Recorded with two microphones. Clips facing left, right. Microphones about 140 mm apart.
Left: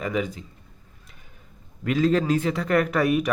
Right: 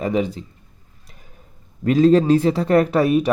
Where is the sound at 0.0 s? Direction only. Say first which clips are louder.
Right 6 dB; 30° right (ahead or behind).